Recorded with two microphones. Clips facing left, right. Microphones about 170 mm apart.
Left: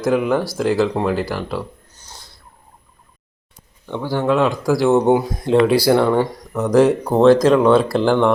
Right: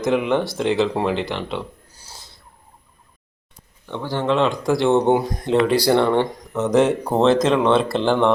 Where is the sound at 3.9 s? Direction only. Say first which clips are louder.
Left 3 dB; 10° left (ahead or behind).